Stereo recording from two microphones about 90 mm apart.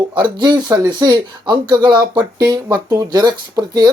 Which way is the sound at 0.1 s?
60° right (ahead or behind).